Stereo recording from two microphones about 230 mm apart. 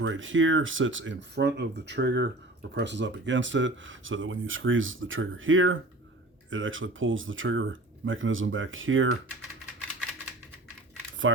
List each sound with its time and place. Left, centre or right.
0.0 s speech: right
11.3 s speech: right